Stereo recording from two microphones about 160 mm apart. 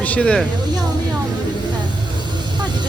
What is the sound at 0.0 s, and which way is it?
Speech, 10° left (ahead or behind).